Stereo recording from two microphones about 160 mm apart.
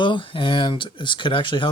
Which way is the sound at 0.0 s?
30° left (ahead or behind).